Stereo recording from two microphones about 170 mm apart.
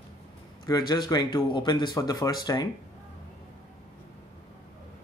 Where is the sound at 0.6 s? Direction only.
25° left (ahead or behind).